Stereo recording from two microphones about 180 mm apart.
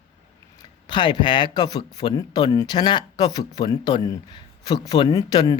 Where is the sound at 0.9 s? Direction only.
25° left (ahead or behind).